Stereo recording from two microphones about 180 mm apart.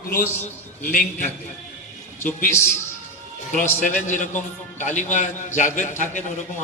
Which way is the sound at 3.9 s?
45° left (ahead or behind).